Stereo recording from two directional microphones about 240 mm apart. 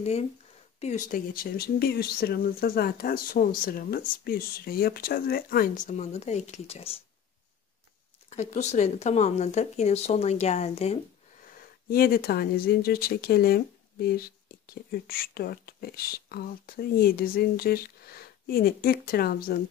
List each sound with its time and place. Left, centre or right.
0.7 s speech: left
8.3 s speech: left
11.5 s speech: left